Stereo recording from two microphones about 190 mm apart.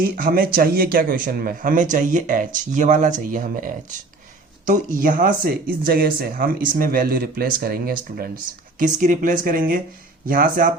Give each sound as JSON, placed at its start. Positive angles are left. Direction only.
{"t": 0.0, "sound": "speech", "side_deg": -50}